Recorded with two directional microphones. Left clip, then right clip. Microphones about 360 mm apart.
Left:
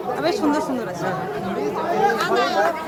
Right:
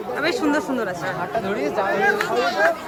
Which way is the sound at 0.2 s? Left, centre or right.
Centre.